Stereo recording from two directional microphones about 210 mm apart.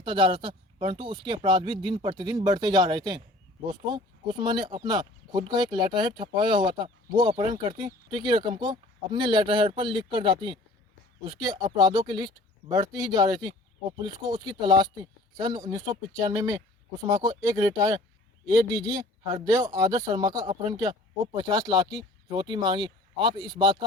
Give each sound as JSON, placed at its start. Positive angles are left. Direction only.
{"t": 0.0, "sound": "speech", "side_deg": -25}